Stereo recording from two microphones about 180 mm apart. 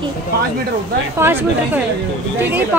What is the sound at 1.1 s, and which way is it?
Speech, 10° right (ahead or behind).